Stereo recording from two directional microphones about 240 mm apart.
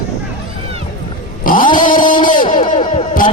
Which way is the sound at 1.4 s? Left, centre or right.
Left.